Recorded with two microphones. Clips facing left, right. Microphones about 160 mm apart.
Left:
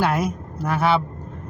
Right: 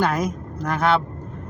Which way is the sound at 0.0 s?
5° left (ahead or behind).